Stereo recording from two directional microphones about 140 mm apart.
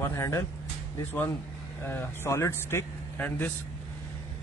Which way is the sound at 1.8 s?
15° left (ahead or behind).